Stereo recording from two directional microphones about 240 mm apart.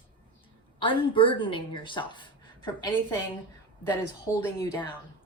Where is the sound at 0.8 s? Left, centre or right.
Left.